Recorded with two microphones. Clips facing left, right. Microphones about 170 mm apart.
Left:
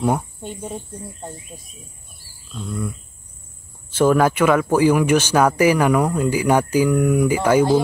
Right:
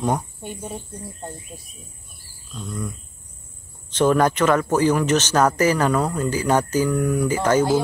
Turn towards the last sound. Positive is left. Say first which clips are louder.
# left 3 dB
turn(degrees=10)  # may be behind; listen again after turning